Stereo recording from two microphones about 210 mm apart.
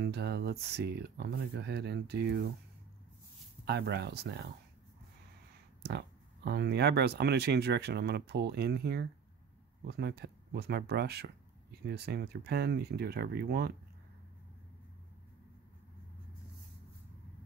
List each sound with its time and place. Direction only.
0.0 s speech: 50° right (ahead or behind)
3.6 s speech: 50° right (ahead or behind)
5.8 s speech: 50° right (ahead or behind)